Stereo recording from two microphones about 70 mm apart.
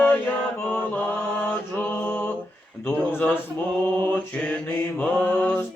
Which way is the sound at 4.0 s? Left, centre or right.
Left.